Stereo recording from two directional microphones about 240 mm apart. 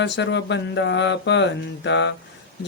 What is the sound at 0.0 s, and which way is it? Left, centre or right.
Speech, left.